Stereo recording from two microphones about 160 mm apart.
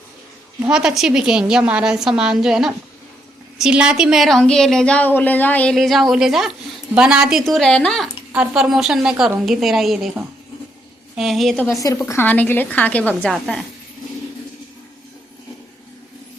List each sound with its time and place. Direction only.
0.6 s speech: 5° right (ahead or behind)
11.7 s a woman's voice: 20° left (ahead or behind); by 13.7 s centre (ahead or behind)